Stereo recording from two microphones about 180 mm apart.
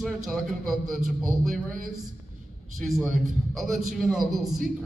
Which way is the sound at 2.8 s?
Centre (ahead or behind).